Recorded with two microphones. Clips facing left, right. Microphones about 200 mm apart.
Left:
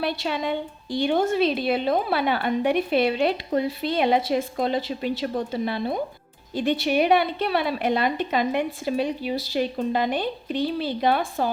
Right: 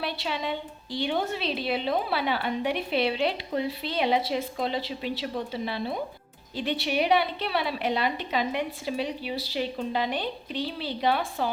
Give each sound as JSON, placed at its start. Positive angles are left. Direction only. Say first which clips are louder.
{"t": 0.0, "sound": "a woman's voice", "louder": "left 5 dB", "side_deg": 50}